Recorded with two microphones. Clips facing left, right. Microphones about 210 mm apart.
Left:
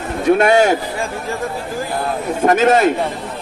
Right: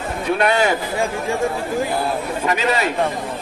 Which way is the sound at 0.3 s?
45° left (ahead or behind).